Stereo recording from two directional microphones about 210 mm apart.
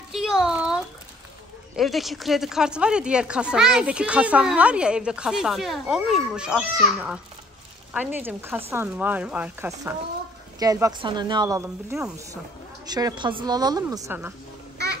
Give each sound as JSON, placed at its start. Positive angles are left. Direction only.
{"t": 0.1, "sound": "a sound", "side_deg": 0}
{"t": 1.8, "sound": "speech", "side_deg": 0}
{"t": 7.9, "sound": "a woman's voice", "side_deg": -10}